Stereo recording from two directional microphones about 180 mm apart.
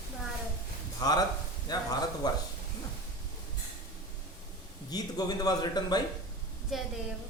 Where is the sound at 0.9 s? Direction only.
20° left (ahead or behind).